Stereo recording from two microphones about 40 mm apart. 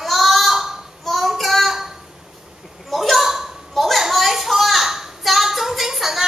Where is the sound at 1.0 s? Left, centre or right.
Centre.